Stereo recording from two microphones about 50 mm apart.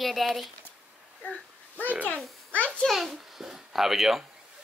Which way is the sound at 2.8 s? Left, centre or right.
Centre.